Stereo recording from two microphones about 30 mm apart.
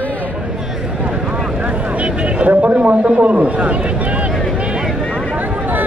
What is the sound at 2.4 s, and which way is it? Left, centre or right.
A man's voice, right.